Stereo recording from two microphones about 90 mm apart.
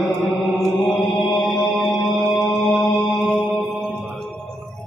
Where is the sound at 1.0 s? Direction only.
Centre (ahead or behind).